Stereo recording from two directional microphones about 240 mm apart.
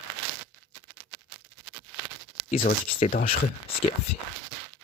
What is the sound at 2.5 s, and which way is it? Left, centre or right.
Speech, left.